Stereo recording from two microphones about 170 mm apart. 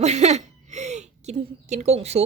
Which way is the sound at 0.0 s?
40° right (ahead or behind).